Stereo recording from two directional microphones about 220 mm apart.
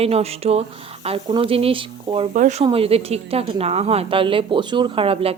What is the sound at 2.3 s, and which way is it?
A woman's voice, 35° right (ahead or behind).